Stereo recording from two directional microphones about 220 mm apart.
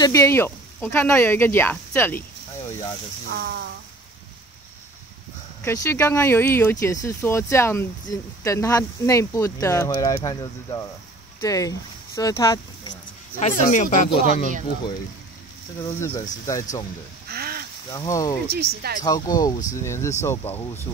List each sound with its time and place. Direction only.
0.0 s speech: 15° left (ahead or behind)
3.3 s speech: 50° right (ahead or behind)
5.6 s speech: 15° left (ahead or behind)
13.4 s speech: 35° left (ahead or behind)
16.0 s speech: 15° left (ahead or behind)
17.3 s a sound: 45° right (ahead or behind)
17.9 s speech: 15° left (ahead or behind)
18.5 s speech: 45° right (ahead or behind)
19.0 s speech: 15° left (ahead or behind)